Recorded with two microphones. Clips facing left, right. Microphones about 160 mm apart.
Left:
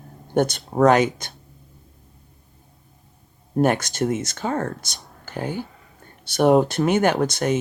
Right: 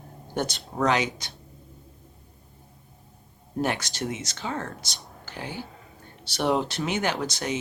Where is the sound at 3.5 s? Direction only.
50° left (ahead or behind).